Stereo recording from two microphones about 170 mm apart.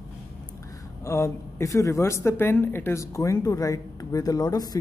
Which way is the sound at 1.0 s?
15° left (ahead or behind).